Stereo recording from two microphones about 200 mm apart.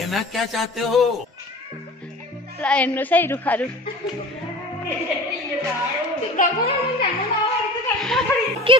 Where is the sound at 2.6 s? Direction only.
5° left (ahead or behind).